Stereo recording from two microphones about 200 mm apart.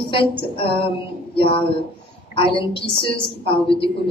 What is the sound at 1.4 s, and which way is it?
A woman's voice, 25° left (ahead or behind).